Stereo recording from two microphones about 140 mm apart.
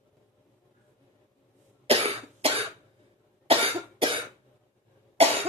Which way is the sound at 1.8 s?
45° right (ahead or behind).